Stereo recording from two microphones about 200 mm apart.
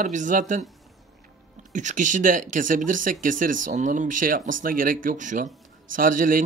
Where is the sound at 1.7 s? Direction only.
40° right (ahead or behind).